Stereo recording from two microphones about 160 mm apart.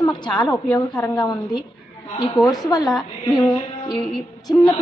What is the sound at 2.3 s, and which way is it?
Speech, 5° left (ahead or behind).